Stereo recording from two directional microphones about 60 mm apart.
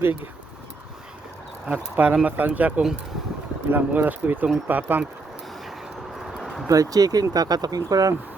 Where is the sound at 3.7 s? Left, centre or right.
Right.